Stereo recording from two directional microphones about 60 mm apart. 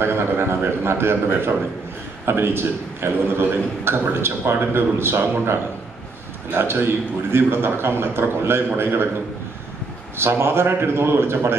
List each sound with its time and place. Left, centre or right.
0.0 s a man's voice: right
10.1 s a man's voice: right